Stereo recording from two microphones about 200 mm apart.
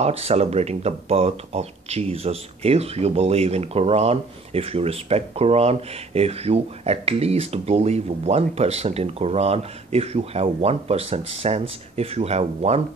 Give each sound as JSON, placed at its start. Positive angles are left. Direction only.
{"t": 0.0, "sound": "speech", "side_deg": -30}